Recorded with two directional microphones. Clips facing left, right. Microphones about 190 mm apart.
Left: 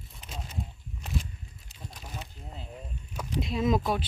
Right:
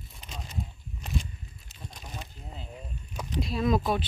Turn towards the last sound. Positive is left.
turn(degrees=15)  # may be behind; listen again after turning